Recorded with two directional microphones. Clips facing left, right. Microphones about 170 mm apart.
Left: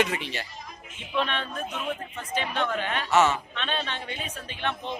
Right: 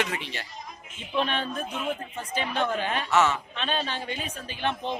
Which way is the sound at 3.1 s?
20° left (ahead or behind).